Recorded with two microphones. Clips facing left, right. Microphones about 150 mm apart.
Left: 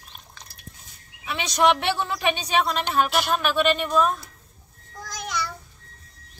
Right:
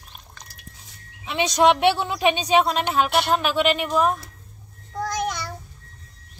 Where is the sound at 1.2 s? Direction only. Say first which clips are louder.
Right 3 dB; 20° right (ahead or behind).